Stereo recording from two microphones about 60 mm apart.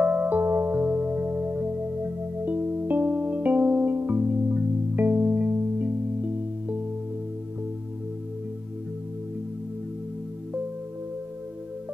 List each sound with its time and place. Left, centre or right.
0.0 s music: right